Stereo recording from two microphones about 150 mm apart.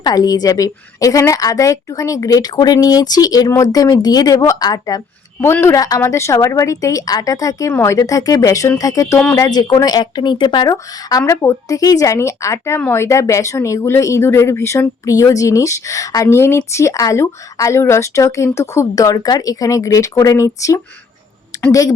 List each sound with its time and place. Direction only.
0.0 s a woman's voice: 25° left (ahead or behind)